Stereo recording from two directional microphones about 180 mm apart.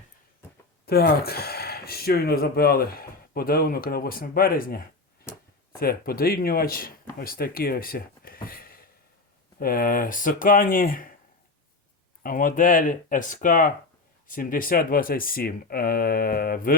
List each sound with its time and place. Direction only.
0.9 s speech: 60° left (ahead or behind)
5.3 s a sound: 15° left (ahead or behind)
5.8 s speech: 55° left (ahead or behind)
12.2 s speech: 50° left (ahead or behind)